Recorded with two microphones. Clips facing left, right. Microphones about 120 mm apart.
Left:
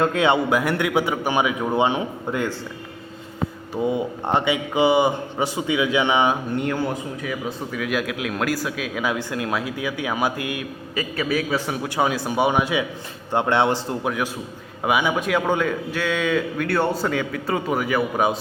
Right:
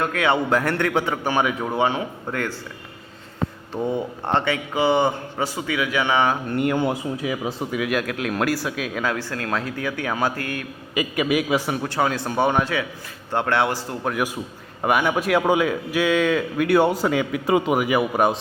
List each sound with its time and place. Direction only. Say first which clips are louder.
0.0 s speech: left 3 dB; 25° left (ahead or behind)
0.5 s a man's voice: even; 10° left (ahead or behind)
1.7 s speech: left 1 dB; 20° left (ahead or behind)
3.8 s a man's voice: left 2 dB; 10° left (ahead or behind)
6.5 s a man's voice: right 2 dB; 5° right (ahead or behind)
6.7 s speech: right 3 dB; 20° right (ahead or behind)
7.7 s a man's voice: right 1 dB; 5° right (ahead or behind)
9.0 s a man's voice: left 3 dB; 15° left (ahead or behind)
10.9 s a man's voice: right 3 dB; 15° right (ahead or behind)
11.9 s a man's voice: left 1 dB; 10° left (ahead or behind)
14.8 s a man's voice: right 1 dB; centre (ahead or behind)
16.6 s a man's voice: right 7 dB; 15° right (ahead or behind)